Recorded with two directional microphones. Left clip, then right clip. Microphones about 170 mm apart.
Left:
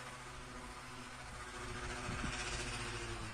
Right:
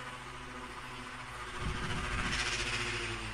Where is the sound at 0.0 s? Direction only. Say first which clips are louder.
Right 6 dB; 90° left; by 2.8 s 50° left (ahead or behind).